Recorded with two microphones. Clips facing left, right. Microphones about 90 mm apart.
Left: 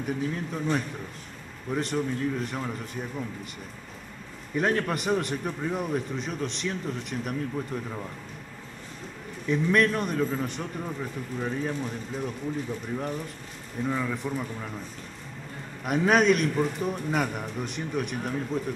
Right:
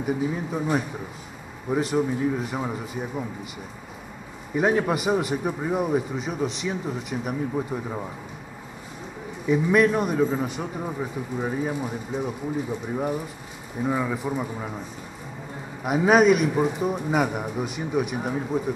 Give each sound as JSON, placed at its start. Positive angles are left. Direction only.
{"t": 0.0, "sound": "a man's voice", "side_deg": -10}
{"t": 4.6, "sound": "a man's voice", "side_deg": -10}
{"t": 7.5, "sound": "a man's voice", "side_deg": -15}
{"t": 9.5, "sound": "a man's voice", "side_deg": -5}
{"t": 15.8, "sound": "a man's voice", "side_deg": -5}